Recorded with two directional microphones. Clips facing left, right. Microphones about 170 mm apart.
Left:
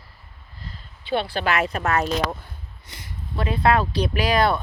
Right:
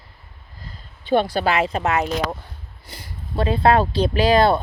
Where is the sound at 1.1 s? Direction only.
45° right (ahead or behind).